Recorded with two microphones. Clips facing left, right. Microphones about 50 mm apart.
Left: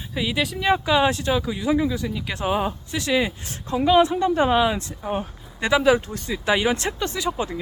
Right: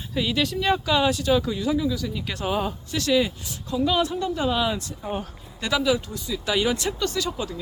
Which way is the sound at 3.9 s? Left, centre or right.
Left.